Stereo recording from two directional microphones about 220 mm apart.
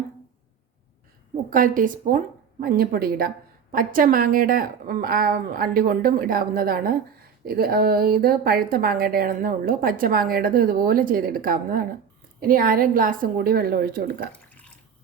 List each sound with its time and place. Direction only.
1.5 s speech: 40° right (ahead or behind)